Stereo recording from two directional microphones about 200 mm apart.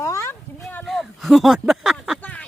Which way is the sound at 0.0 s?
15° left (ahead or behind).